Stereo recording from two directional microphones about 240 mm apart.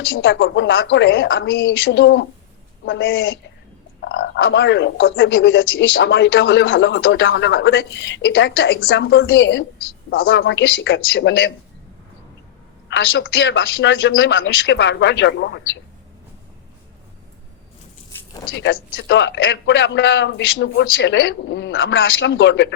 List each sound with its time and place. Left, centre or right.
0.1 s speech: left
12.9 s speech: left
18.5 s speech: left